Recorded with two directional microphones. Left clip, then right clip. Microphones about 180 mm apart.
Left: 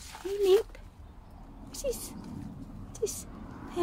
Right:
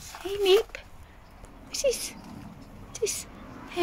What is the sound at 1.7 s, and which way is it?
Speech, 15° left (ahead or behind).